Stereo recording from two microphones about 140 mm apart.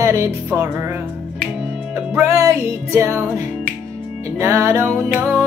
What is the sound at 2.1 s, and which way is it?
Music, 15° right (ahead or behind).